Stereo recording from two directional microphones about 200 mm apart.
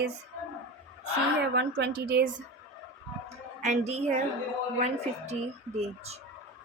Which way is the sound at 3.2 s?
35° right (ahead or behind).